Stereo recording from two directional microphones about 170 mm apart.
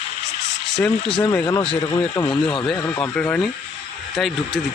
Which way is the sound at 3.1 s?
5° left (ahead or behind).